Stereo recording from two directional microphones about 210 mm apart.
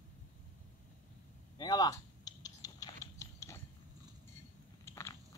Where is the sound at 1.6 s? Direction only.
20° left (ahead or behind).